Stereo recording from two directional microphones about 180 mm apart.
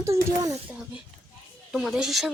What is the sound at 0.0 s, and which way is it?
Speech, 15° right (ahead or behind).